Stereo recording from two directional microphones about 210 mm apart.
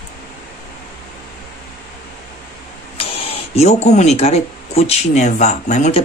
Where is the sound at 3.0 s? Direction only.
25° left (ahead or behind).